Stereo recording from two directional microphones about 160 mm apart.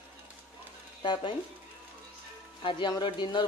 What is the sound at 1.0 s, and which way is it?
Speech, 30° left (ahead or behind).